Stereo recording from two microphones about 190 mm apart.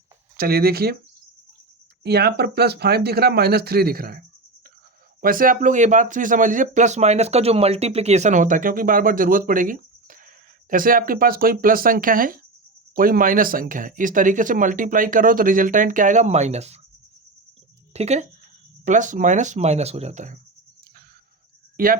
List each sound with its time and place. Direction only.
0.3 s speech: 55° right (ahead or behind)
2.0 s speech: 60° right (ahead or behind)
5.2 s speech: 45° right (ahead or behind)
9.5 s a sound: 45° right (ahead or behind)
10.7 s speech: 45° right (ahead or behind)
17.9 s speech: 35° right (ahead or behind)
21.8 s speech: 50° right (ahead or behind)